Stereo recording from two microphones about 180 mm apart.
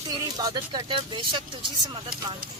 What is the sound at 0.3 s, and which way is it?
Speech, 25° right (ahead or behind).